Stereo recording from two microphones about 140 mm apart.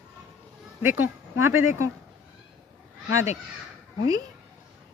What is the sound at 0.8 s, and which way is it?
Speech, 15° right (ahead or behind).